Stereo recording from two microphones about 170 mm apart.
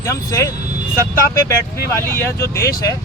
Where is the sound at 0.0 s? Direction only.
20° left (ahead or behind).